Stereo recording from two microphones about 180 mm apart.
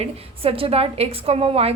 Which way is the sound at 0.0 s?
30° right (ahead or behind).